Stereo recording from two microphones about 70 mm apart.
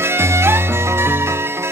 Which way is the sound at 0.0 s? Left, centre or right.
Right.